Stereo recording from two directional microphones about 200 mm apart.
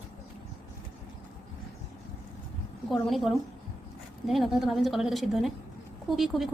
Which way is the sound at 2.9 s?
Centre (ahead or behind).